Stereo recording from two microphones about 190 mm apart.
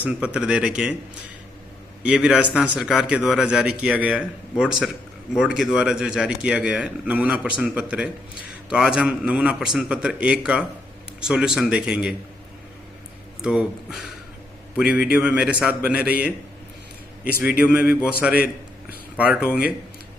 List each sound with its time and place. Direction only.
0.0 s a man's voice: 5° right (ahead or behind)
2.0 s a man's voice: 5° right (ahead or behind)
13.4 s a man's voice: 5° right (ahead or behind)
15.1 s a man's voice: 5° right (ahead or behind)
17.6 s a man's voice: 5° right (ahead or behind)